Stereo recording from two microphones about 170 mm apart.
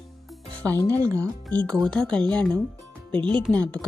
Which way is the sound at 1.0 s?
20° right (ahead or behind).